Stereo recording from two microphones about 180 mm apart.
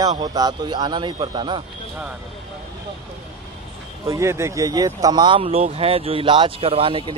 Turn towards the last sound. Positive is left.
turn(degrees=-30)  # may be behind; listen again after turning